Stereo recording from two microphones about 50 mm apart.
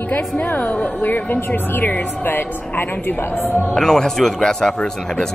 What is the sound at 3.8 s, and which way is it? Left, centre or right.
Speech, centre.